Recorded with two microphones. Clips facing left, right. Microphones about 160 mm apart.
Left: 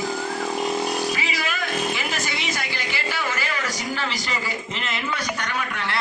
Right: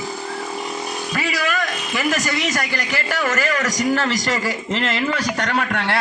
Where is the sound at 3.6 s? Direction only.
45° right (ahead or behind).